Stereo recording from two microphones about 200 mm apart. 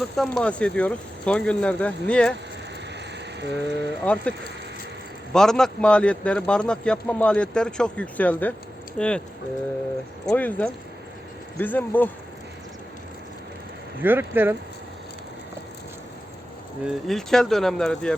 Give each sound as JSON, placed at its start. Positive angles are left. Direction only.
{"t": 0.2, "sound": "a man's voice", "side_deg": 5}
{"t": 3.4, "sound": "speech", "side_deg": -60}
{"t": 4.0, "sound": "a man's voice", "side_deg": 5}
{"t": 10.3, "sound": "speech", "side_deg": 10}
{"t": 14.0, "sound": "speech", "side_deg": -10}
{"t": 16.8, "sound": "a man's voice", "side_deg": 0}